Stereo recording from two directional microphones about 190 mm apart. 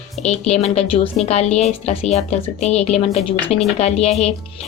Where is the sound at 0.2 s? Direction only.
35° left (ahead or behind).